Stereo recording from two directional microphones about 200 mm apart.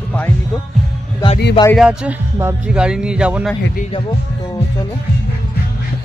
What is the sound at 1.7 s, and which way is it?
Speech, 5° right (ahead or behind).